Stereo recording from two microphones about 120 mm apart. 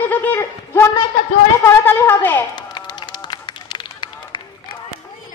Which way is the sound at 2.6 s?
35° left (ahead or behind).